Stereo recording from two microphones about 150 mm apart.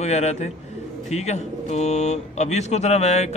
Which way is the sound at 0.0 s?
45° left (ahead or behind).